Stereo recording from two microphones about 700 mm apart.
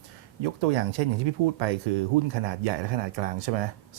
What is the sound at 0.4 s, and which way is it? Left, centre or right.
Speech, right.